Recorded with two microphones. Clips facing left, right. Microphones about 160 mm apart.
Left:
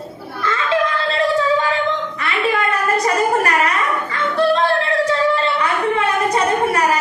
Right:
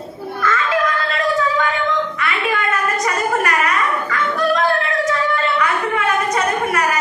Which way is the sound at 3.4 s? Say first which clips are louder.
Left 1 dB; 30° left (ahead or behind).